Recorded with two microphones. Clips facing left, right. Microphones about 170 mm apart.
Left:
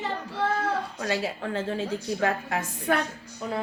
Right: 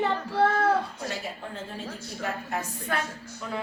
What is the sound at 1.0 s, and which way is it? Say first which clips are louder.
A woman's voice: left 6 dB; 90° left.